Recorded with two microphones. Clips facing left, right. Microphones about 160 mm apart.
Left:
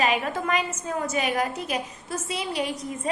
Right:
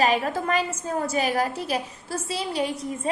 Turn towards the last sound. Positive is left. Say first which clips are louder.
# right 2 dB
turn(degrees=-30)  # may be behind; listen again after turning